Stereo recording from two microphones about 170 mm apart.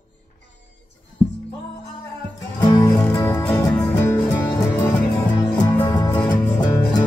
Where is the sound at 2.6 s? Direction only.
25° left (ahead or behind).